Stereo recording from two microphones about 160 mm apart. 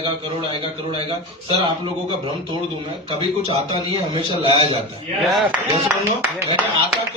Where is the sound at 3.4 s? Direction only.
35° right (ahead or behind).